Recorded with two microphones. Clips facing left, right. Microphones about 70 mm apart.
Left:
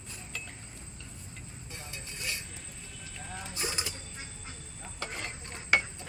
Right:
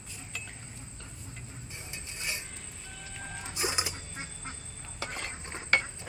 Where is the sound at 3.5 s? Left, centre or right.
Centre.